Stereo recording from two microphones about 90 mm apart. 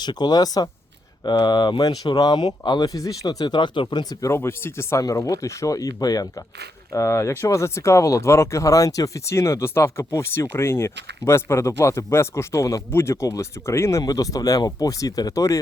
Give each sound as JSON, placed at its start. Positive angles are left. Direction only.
{"t": 0.0, "sound": "speech", "side_deg": 50}
{"t": 4.4, "sound": "speech", "side_deg": 25}
{"t": 6.9, "sound": "speech", "side_deg": 35}
{"t": 14.0, "sound": "speech", "side_deg": 45}